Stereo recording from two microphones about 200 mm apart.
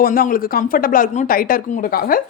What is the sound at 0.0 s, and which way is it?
Speech, 45° left (ahead or behind).